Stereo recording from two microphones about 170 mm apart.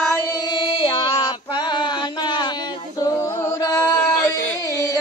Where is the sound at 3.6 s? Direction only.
20° left (ahead or behind).